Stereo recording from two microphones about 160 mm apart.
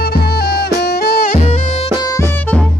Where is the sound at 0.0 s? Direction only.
75° left (ahead or behind).